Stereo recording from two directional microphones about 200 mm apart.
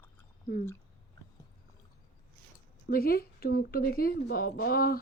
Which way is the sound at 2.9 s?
50° left (ahead or behind).